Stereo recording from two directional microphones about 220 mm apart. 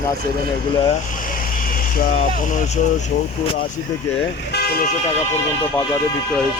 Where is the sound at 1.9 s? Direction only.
40° left (ahead or behind).